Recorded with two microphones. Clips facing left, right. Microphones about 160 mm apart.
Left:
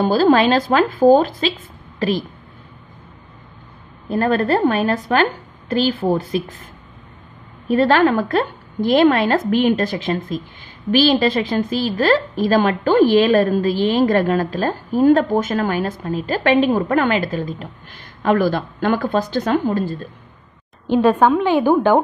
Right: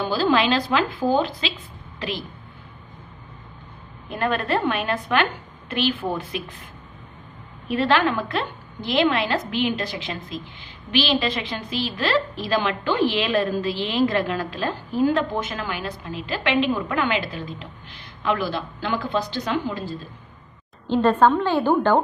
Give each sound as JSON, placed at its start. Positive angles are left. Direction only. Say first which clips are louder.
{"t": 0.0, "sound": "a woman's voice", "louder": "left 7 dB", "side_deg": 45}
{"t": 4.1, "sound": "a woman's voice", "louder": "left 6 dB", "side_deg": 40}
{"t": 7.6, "sound": "a woman's voice", "louder": "left 6 dB", "side_deg": 45}
{"t": 20.8, "sound": "a woman's voice", "louder": "left 3 dB", "side_deg": 15}